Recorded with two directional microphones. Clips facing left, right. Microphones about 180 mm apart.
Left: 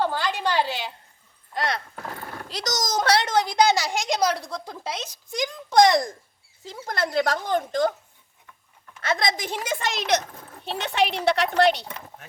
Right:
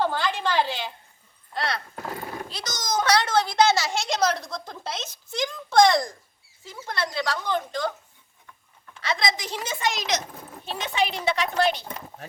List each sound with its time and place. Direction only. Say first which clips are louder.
0.0 s a sound: even; 5° left (ahead or behind)
1.5 s speech: left 2 dB; 20° left (ahead or behind)
2.0 s a sound: right 5 dB; 10° right (ahead or behind)
2.5 s a child's voice: left 5 dB; 40° left (ahead or behind)
3.2 s a woman's voice: even; 20° left (ahead or behind)
6.8 s a woman's voice: left 4 dB; 45° left (ahead or behind)
9.0 s a woman's voice: left 2 dB; 50° left (ahead or behind); by 11.9 s 70° left (ahead or behind)